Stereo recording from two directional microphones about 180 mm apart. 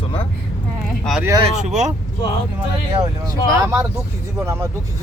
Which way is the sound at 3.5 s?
15° right (ahead or behind).